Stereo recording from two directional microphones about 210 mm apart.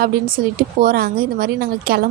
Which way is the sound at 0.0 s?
40° right (ahead or behind).